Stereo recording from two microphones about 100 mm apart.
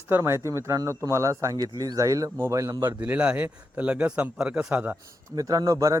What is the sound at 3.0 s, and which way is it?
Speech, 10° right (ahead or behind).